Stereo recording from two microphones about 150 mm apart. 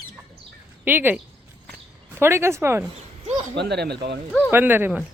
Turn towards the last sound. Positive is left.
turn(degrees=-10)  # may be behind; listen again after turning